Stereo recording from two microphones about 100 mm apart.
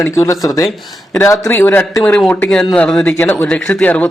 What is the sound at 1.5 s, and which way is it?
Speech, 20° left (ahead or behind).